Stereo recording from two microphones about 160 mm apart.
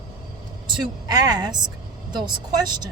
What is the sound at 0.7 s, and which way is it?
Speech, 25° right (ahead or behind).